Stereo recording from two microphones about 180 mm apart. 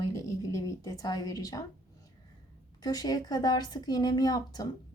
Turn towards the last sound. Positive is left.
turn(degrees=20)  # may be behind; listen again after turning